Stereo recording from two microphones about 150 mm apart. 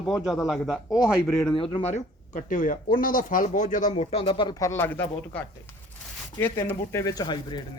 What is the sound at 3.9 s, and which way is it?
Speech, 40° left (ahead or behind).